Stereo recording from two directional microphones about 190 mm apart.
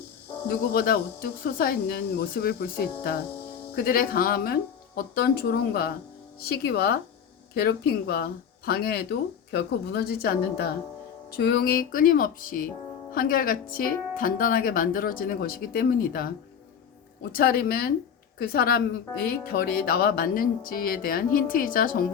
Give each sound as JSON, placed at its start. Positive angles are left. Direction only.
{"t": 0.4, "sound": "speech", "side_deg": 55}
{"t": 17.3, "sound": "speech", "side_deg": 55}